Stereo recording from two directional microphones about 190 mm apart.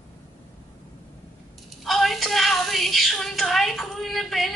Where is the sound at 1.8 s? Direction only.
Centre (ahead or behind).